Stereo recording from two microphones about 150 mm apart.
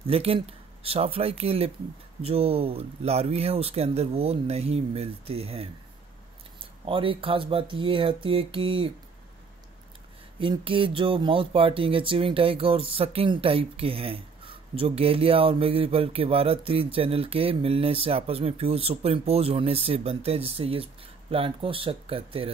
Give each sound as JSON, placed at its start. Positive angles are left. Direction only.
{"t": 0.0, "sound": "speech", "side_deg": -40}
{"t": 6.9, "sound": "speech", "side_deg": -35}
{"t": 10.4, "sound": "speech", "side_deg": -35}